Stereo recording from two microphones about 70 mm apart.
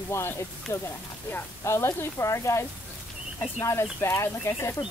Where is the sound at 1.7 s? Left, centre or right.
Left.